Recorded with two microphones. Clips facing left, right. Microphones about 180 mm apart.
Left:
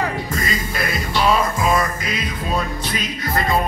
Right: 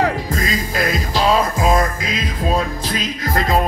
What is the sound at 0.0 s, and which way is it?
Music, 90° right.